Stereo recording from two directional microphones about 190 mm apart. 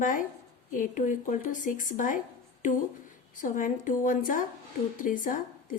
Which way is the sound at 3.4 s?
45° left (ahead or behind).